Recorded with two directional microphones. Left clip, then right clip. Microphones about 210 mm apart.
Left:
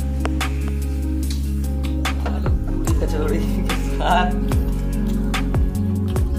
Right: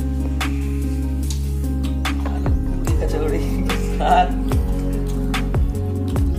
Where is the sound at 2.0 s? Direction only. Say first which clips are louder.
Even; centre (ahead or behind).